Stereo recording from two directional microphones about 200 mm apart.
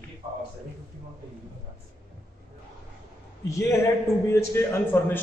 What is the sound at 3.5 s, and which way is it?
A man's voice, 15° left (ahead or behind).